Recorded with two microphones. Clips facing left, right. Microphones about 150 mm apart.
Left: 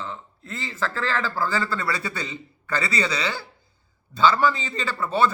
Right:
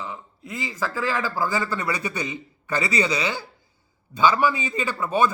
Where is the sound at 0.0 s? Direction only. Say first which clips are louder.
Even; 15° right (ahead or behind).